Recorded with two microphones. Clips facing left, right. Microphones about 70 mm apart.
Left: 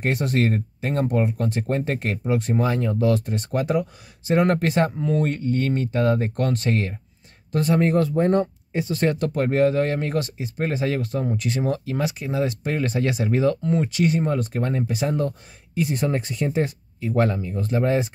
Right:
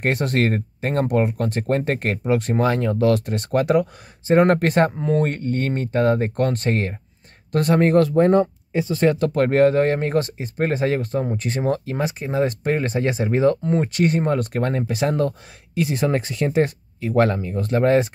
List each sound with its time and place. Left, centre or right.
0.0 s speech: right
4.3 s speech: right
7.5 s speech: right
9.3 s speech: right
9.6 s speech: right
13.9 s speech: right